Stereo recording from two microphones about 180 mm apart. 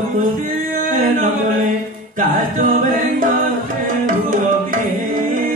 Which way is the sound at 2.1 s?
45° right (ahead or behind).